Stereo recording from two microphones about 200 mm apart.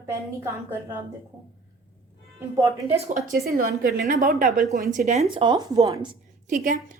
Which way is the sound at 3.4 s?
45° right (ahead or behind).